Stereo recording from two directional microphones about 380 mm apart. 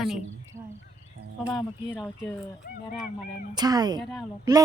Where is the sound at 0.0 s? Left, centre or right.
Centre.